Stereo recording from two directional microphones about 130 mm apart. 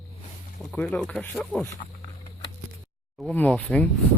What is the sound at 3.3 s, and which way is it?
Speech, 10° left (ahead or behind).